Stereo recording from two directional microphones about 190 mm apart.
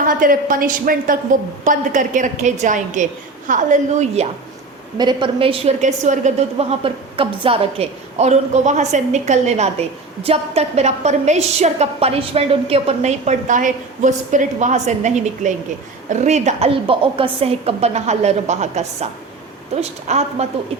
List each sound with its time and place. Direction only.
0.2 s a woman's voice: 45° right (ahead or behind)
4.9 s a woman's voice: 25° right (ahead or behind)
20.1 s a woman's voice: 35° right (ahead or behind)